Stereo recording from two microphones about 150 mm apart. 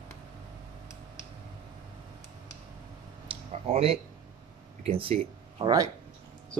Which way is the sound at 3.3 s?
40° right (ahead or behind).